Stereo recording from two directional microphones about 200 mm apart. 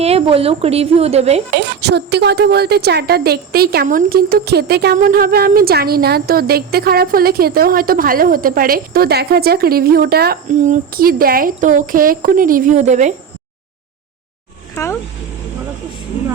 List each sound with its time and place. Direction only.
0.0 s a woman's voice: 30° right (ahead or behind)
1.5 s a woman's voice: 55° right (ahead or behind); by 13.1 s 35° right (ahead or behind)
14.8 s speech: 15° left (ahead or behind)